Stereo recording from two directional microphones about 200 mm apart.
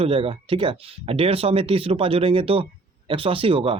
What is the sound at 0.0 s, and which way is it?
Speech, 25° right (ahead or behind).